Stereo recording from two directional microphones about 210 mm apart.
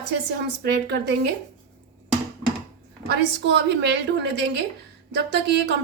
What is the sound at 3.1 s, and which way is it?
A woman's voice, 55° right (ahead or behind).